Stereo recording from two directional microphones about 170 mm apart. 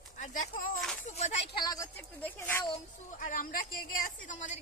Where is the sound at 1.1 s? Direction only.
40° left (ahead or behind).